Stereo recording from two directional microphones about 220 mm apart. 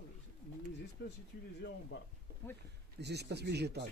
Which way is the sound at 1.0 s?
50° left (ahead or behind).